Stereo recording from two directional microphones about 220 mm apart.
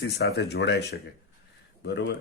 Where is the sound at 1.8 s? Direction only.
50° left (ahead or behind).